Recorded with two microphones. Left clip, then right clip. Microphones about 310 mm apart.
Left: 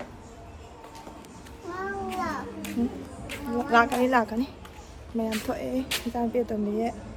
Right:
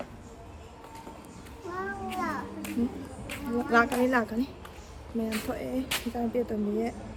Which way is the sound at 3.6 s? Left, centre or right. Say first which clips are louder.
Left 3 dB; centre.